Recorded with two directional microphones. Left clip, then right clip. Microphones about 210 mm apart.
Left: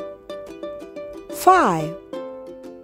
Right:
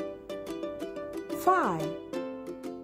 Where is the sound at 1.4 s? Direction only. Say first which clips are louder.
Left 11 dB; 45° left (ahead or behind).